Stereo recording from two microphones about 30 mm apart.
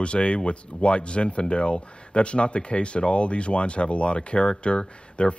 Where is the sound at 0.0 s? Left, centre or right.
Left.